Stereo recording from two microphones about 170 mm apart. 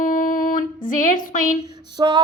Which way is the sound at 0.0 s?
50° left (ahead or behind).